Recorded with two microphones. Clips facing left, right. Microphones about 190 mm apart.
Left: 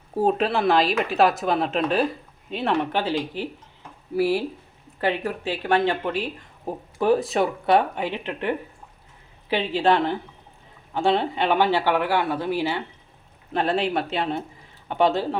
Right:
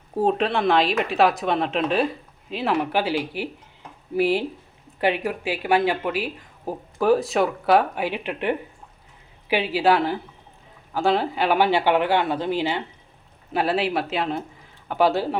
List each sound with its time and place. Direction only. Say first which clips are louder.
0.1 s speech: even; centre (ahead or behind); by 12.8 s 20° right (ahead or behind)
13.5 s speech: even; 5° right (ahead or behind)